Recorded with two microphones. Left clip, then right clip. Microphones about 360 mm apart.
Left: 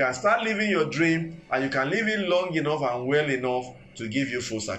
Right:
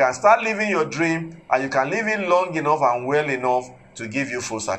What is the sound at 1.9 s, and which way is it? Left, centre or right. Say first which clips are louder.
Speech: right 4 dB; right.